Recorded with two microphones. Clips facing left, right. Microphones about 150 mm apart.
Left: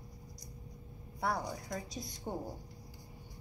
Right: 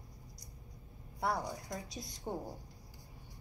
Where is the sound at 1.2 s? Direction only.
5° right (ahead or behind).